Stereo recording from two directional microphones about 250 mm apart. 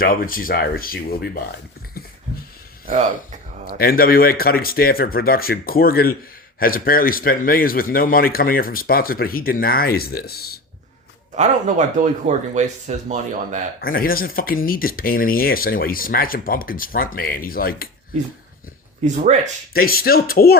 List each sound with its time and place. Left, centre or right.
0.0 s speech: left
2.8 s speech: right
3.7 s speech: left
11.3 s speech: right
13.8 s speech: left
19.0 s speech: right
19.7 s speech: left